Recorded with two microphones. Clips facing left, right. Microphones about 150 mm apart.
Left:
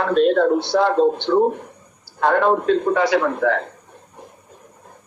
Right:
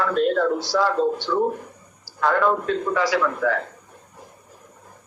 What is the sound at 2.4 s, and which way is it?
Speech, 25° left (ahead or behind).